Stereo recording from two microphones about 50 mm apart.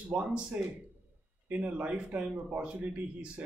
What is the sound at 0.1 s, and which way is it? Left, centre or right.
Speech, centre.